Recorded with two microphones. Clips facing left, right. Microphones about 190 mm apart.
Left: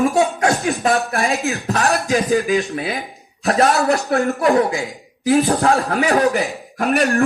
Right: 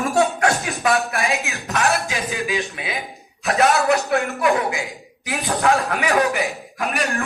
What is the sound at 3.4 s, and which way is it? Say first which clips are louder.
Speech: left 2 dB; 35° left (ahead or behind).